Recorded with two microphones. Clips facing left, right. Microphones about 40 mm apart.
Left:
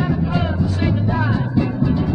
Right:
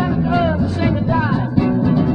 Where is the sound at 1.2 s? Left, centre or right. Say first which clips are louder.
Right 3 dB; centre.